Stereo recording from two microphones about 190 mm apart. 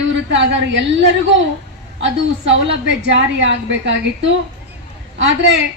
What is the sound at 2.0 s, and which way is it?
A woman's voice, 75° right (ahead or behind).